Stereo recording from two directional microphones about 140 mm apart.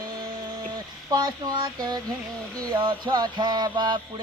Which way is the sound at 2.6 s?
30° right (ahead or behind).